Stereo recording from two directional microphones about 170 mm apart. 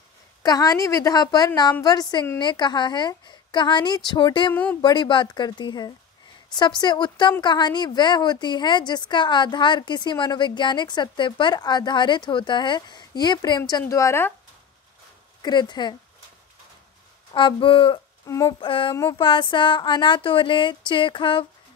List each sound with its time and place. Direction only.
0.4 s a woman's voice: 20° left (ahead or behind)
15.4 s a woman's voice: 25° left (ahead or behind)
17.3 s speech: 30° left (ahead or behind)
18.6 s a sound: 30° left (ahead or behind)
19.1 s a woman's voice: 30° left (ahead or behind)